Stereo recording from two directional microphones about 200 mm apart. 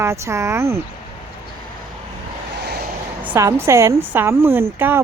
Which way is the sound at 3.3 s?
15° right (ahead or behind).